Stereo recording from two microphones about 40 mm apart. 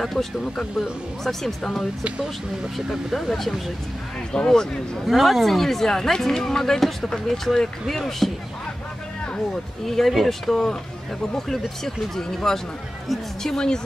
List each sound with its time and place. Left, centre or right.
0.0 s speech: centre
2.9 s speech: centre
4.3 s speech: left
5.0 s speech: centre
9.8 s speech: centre